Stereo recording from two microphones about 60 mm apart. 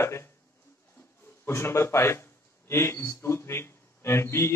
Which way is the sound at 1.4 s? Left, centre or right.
Left.